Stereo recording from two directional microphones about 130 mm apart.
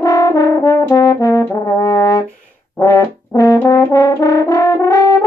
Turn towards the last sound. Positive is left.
turn(degrees=25)  # may be behind; listen again after turning